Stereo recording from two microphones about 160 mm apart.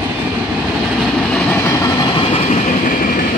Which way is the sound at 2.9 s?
60° left (ahead or behind).